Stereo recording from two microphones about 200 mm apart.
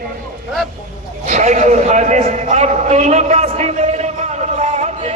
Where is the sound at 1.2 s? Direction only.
40° right (ahead or behind).